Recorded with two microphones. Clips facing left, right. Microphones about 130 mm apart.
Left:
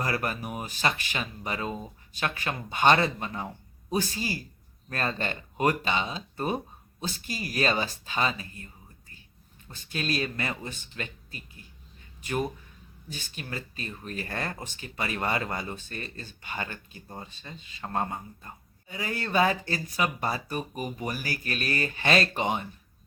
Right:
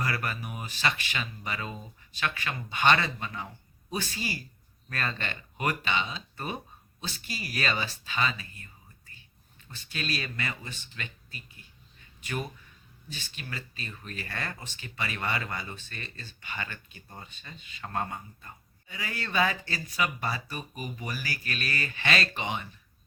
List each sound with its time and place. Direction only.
0.0 s speech: 40° left (ahead or behind)
9.9 s speech: 40° left (ahead or behind)